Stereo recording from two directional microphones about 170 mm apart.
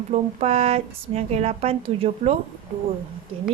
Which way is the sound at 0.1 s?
40° right (ahead or behind).